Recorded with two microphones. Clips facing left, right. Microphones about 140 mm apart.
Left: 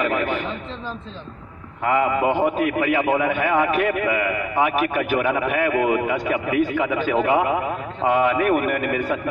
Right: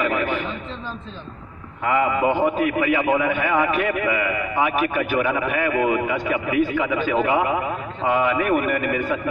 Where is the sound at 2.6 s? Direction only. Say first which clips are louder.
Even; 50° left (ahead or behind).